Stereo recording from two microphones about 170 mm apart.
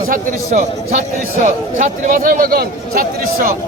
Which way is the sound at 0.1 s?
55° right (ahead or behind).